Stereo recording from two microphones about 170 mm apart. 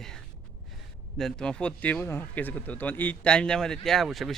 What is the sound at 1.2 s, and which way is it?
Speech, 5° left (ahead or behind).